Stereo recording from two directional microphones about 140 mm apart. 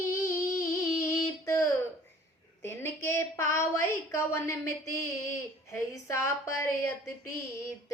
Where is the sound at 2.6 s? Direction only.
15° left (ahead or behind).